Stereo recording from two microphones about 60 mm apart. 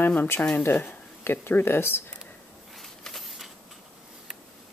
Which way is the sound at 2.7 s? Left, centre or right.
Centre.